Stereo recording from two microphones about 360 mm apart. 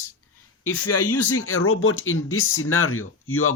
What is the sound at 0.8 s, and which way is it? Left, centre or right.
Speech, left.